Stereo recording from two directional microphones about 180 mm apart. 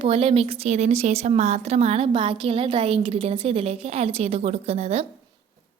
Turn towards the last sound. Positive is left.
turn(degrees=-35)  # may be behind; listen again after turning